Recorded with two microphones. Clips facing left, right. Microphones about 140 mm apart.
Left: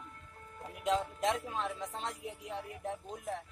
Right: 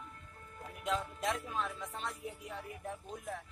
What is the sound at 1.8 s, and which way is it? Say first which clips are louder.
Speech: left 2 dB; 15° left (ahead or behind).